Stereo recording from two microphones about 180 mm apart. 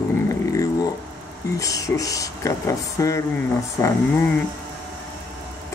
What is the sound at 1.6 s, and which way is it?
Speech, 20° left (ahead or behind).